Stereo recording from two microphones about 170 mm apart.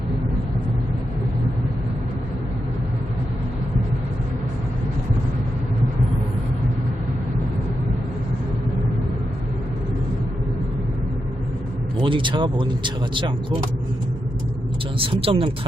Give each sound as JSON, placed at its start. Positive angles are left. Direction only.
{"t": 11.9, "sound": "speech", "side_deg": -30}
{"t": 14.9, "sound": "speech", "side_deg": -30}